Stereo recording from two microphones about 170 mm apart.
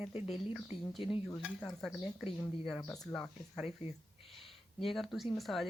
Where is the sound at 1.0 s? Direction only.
30° left (ahead or behind).